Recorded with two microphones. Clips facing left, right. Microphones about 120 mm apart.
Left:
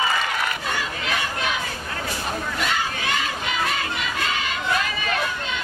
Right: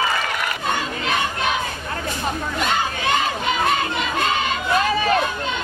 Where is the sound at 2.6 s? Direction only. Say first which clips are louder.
Right 5 dB; 25° right (ahead or behind).